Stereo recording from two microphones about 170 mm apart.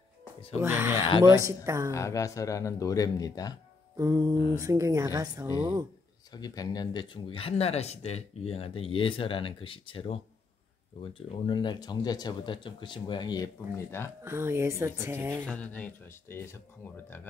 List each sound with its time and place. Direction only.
0.6 s speech: 15° right (ahead or behind)
1.9 s speech: 15° left (ahead or behind)
3.9 s speech: 20° right (ahead or behind)
6.3 s speech: 20° left (ahead or behind)
14.2 s speech: 15° right (ahead or behind)
15.4 s speech: 5° left (ahead or behind)